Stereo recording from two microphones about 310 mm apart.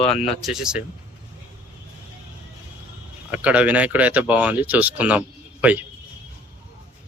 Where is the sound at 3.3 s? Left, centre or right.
Centre.